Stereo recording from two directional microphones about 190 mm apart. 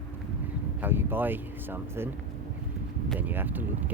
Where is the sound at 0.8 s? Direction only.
10° right (ahead or behind).